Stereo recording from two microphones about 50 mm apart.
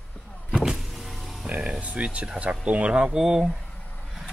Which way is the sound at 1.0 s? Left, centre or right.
Centre.